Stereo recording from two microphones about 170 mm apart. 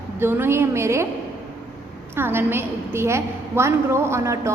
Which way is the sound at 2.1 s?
15° right (ahead or behind).